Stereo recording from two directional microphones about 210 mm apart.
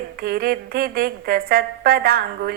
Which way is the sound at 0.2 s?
45° right (ahead or behind).